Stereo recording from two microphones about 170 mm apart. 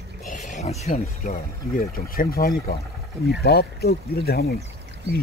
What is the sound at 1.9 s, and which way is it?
Speech, 60° left (ahead or behind).